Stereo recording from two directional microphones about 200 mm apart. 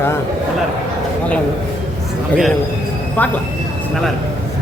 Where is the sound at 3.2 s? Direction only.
10° left (ahead or behind).